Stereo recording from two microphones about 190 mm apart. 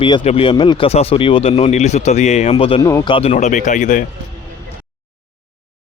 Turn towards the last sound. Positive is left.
turn(degrees=45)  # may be behind; listen again after turning